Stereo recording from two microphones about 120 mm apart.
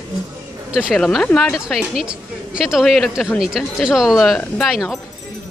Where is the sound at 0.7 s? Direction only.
5° right (ahead or behind).